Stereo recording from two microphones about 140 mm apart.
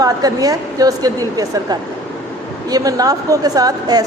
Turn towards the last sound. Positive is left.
turn(degrees=-25)  # may be behind; listen again after turning